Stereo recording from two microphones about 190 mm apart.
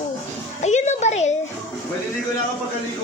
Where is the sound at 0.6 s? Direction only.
35° left (ahead or behind).